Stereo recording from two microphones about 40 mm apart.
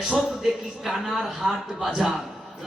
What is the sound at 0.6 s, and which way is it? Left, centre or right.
Speech, centre.